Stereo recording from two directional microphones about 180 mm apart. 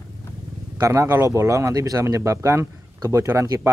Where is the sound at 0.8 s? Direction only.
15° right (ahead or behind).